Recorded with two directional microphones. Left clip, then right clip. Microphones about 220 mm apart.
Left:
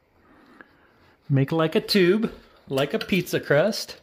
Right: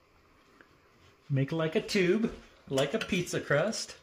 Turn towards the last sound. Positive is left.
turn(degrees=45)  # may be behind; listen again after turning